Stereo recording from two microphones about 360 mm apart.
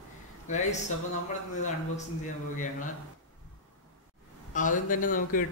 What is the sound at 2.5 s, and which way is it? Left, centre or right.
Speech, left.